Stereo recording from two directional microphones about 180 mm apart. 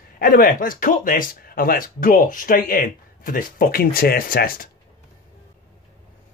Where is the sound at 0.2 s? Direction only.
50° left (ahead or behind).